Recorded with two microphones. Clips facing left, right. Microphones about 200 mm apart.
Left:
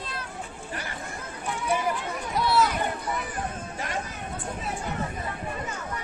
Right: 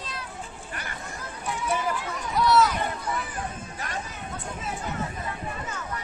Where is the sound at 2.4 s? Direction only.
30° left (ahead or behind).